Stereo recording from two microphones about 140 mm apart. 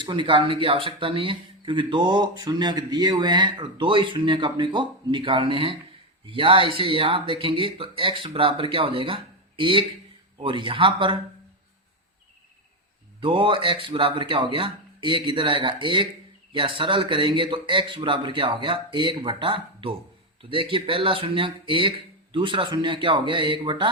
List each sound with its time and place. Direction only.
0.0 s speech: 35° right (ahead or behind)
13.1 s speech: 35° right (ahead or behind)